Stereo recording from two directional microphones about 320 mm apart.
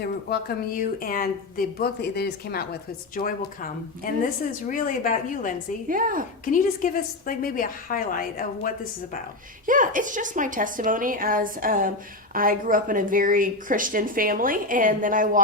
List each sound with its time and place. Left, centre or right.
0.0 s a woman's voice: left
5.9 s speech: right
6.4 s a woman's voice: left
9.6 s speech: right